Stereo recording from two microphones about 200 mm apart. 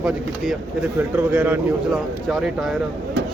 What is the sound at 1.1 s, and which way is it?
Speech, 10° right (ahead or behind).